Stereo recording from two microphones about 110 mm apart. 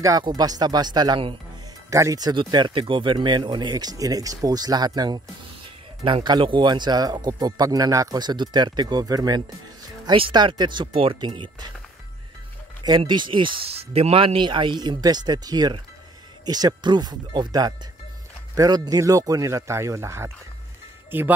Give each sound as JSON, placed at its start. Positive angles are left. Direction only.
{"t": 0.2, "sound": "speech", "side_deg": -35}
{"t": 1.9, "sound": "speech", "side_deg": -30}
{"t": 12.8, "sound": "speech", "side_deg": -45}